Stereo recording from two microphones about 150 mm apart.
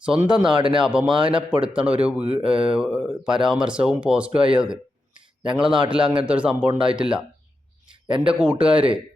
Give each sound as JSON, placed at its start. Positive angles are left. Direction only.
{"t": 0.0, "sound": "speech", "side_deg": -5}
{"t": 0.5, "sound": "speech", "side_deg": -35}
{"t": 0.8, "sound": "speech", "side_deg": -5}
{"t": 5.9, "sound": "speech", "side_deg": -5}
{"t": 8.0, "sound": "speech", "side_deg": -35}
{"t": 8.3, "sound": "speech", "side_deg": -5}